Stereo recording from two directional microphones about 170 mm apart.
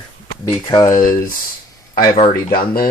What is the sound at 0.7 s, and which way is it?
Speech, 25° left (ahead or behind).